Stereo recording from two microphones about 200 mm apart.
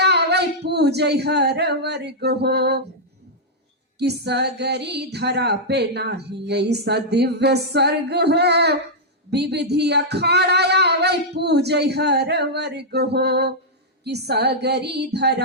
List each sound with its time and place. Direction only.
0.0 s speech: 55° right (ahead or behind)
3.9 s speech: 55° right (ahead or behind)